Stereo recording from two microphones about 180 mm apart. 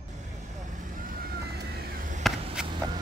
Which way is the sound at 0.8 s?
50° right (ahead or behind).